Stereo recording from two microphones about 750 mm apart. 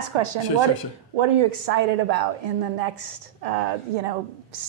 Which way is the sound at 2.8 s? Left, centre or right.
Right.